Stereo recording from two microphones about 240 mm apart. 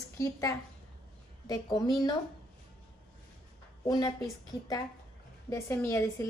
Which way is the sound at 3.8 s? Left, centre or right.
Centre.